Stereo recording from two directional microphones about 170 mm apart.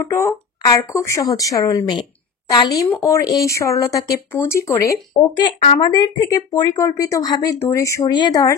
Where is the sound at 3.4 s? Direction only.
20° left (ahead or behind).